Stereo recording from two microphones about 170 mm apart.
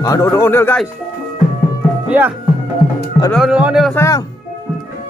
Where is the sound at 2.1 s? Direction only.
10° right (ahead or behind).